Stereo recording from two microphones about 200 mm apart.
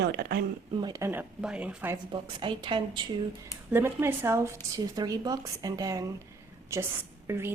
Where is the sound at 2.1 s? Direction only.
25° right (ahead or behind).